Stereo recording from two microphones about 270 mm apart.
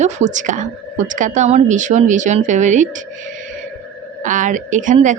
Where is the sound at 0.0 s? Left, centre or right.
Right.